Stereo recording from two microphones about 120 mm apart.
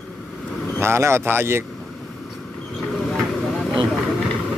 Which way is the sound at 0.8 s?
20° right (ahead or behind).